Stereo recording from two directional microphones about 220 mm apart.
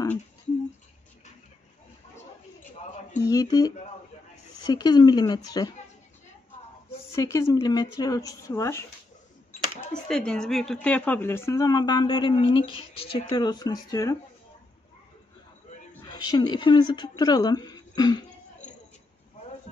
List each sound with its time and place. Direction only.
3.2 s speech: 15° left (ahead or behind)
7.1 s speech: 15° left (ahead or behind)
15.9 s a woman's voice: 15° left (ahead or behind)